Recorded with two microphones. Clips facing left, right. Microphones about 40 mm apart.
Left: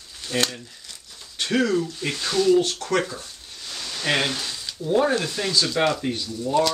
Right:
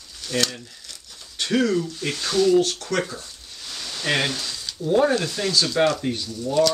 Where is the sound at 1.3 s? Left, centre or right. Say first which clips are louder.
Right 1 dB; centre.